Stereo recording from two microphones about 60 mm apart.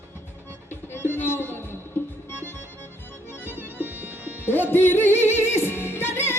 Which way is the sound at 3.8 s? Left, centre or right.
Right.